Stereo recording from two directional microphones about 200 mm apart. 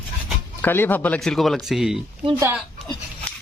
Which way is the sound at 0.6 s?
10° left (ahead or behind).